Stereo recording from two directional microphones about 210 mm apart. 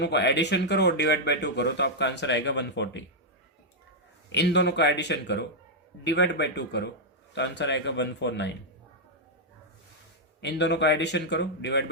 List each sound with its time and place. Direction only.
0.0 s speech: 55° left (ahead or behind)
4.3 s speech: 55° left (ahead or behind)
10.4 s speech: 55° left (ahead or behind)